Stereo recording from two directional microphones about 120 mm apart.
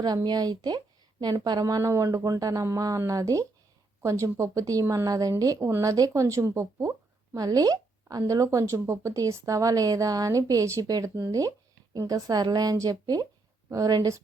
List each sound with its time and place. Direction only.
0.0 s a woman's voice: 35° right (ahead or behind)